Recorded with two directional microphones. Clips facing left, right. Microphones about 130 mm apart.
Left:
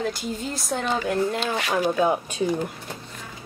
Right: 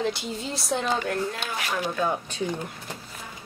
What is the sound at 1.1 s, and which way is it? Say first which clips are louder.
Speech: left 5 dB; 30° left (ahead or behind).